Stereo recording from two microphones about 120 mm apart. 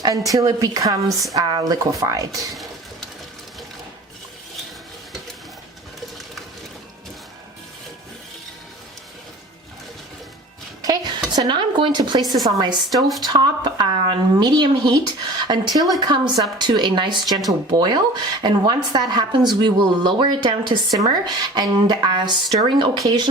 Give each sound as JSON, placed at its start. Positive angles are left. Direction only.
{"t": 0.0, "sound": "speech", "side_deg": -30}
{"t": 10.8, "sound": "a sound", "side_deg": -35}
{"t": 11.3, "sound": "a woman's voice", "side_deg": -40}